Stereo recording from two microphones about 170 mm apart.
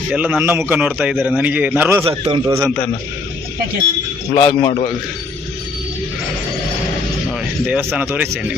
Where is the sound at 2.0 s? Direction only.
30° right (ahead or behind).